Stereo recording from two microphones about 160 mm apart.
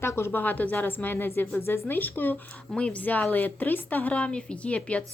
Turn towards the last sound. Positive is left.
turn(degrees=10)  # may be behind; listen again after turning